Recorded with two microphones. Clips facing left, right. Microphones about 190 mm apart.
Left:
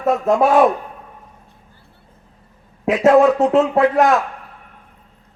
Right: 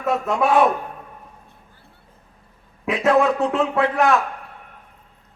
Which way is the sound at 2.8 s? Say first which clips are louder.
Left 6 dB; 40° left (ahead or behind).